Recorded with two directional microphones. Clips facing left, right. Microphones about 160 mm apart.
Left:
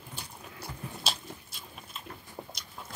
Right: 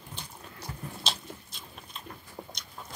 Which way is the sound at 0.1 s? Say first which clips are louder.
Even; 10° left (ahead or behind).